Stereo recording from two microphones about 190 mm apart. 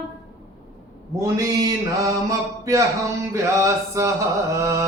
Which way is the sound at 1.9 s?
15° right (ahead or behind).